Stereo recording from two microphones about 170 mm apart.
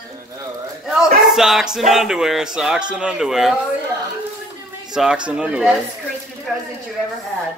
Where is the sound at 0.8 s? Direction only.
5° right (ahead or behind).